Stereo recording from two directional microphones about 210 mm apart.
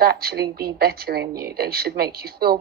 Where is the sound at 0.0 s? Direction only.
45° right (ahead or behind).